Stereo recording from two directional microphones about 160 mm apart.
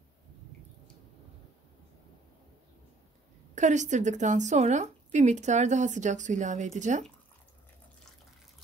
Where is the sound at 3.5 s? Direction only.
50° right (ahead or behind).